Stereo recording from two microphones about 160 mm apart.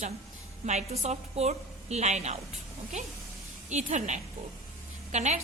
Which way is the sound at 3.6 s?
50° right (ahead or behind).